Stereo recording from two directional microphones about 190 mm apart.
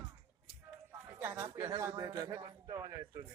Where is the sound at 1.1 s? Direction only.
10° right (ahead or behind).